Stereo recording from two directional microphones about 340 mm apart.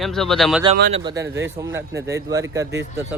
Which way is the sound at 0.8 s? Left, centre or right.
Right.